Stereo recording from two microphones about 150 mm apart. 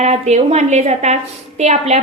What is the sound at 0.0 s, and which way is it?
A woman's voice, 50° right (ahead or behind).